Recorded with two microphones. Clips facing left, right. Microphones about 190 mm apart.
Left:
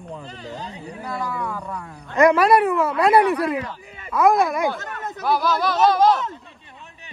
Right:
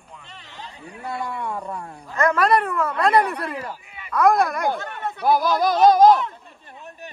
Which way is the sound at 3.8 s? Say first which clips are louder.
Left 2 dB; 40° left (ahead or behind).